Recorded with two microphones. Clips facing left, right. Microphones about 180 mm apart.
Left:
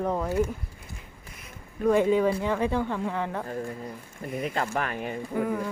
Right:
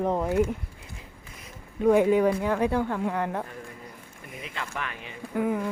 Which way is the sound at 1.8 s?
15° right (ahead or behind).